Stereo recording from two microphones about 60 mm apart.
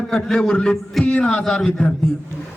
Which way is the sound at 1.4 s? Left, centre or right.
Centre.